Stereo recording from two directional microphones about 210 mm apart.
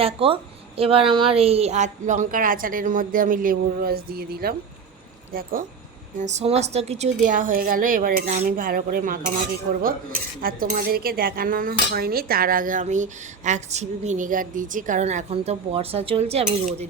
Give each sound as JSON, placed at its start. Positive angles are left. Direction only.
{"t": 0.0, "sound": "a woman's voice", "side_deg": -25}
{"t": 6.1, "sound": "speech", "side_deg": -35}
{"t": 10.4, "sound": "speech", "side_deg": -45}